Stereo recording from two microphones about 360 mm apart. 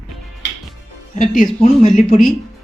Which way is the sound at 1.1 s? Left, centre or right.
Left.